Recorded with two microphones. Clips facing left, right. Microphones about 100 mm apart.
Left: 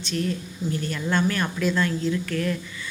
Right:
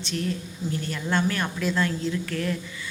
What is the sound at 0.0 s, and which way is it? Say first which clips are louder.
A woman's voice: left 2 dB; 25° right (ahead or behind).